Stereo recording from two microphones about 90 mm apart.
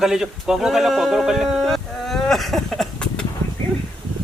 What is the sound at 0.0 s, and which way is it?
Speech, 5° right (ahead or behind).